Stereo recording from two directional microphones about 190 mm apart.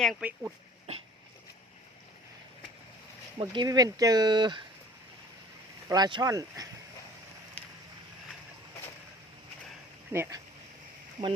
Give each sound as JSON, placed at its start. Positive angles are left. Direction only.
{"t": 0.0, "sound": "speech", "side_deg": 0}
{"t": 3.3, "sound": "speech", "side_deg": -25}
{"t": 5.9, "sound": "speech", "side_deg": -20}
{"t": 7.6, "sound": "vehicle", "side_deg": 10}
{"t": 10.1, "sound": "speech", "side_deg": -15}